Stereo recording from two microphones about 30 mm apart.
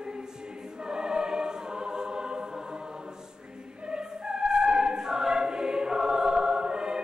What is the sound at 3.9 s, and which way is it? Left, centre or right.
Music, right.